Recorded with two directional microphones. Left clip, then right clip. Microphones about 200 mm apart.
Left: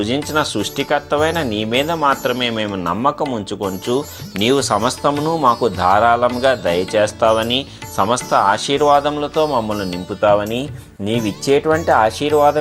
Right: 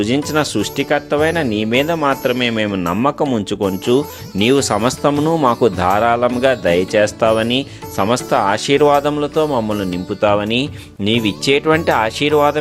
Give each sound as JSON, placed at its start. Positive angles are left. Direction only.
{"t": 0.0, "sound": "speech", "side_deg": -30}